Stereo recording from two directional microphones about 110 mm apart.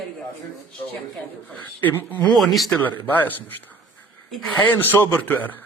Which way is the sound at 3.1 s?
15° left (ahead or behind).